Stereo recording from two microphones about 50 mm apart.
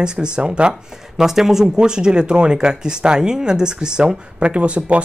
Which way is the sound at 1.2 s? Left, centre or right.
Centre.